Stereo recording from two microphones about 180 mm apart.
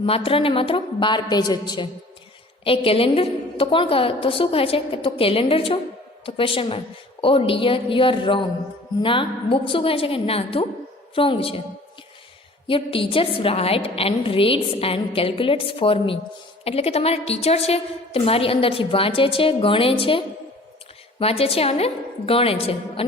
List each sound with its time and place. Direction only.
0.0 s a woman's voice: 30° left (ahead or behind)
12.6 s a woman's voice: 30° left (ahead or behind)